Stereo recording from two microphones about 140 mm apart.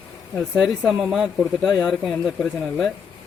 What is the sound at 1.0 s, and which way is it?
Speech, centre (ahead or behind).